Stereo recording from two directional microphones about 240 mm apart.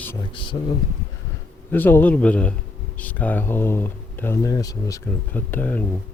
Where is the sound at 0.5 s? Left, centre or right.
Left.